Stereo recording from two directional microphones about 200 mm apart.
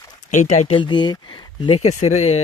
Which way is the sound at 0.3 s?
35° left (ahead or behind).